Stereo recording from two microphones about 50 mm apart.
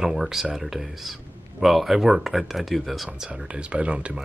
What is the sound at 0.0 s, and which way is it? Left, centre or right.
Speech, centre.